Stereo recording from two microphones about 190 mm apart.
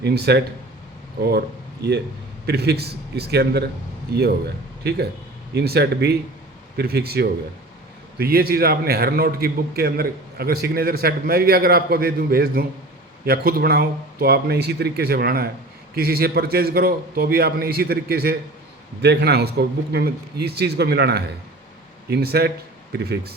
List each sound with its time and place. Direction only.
0.0 s a man's voice: 60° right (ahead or behind)